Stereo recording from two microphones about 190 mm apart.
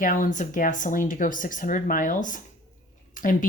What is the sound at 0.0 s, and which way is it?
Speech, 45° left (ahead or behind).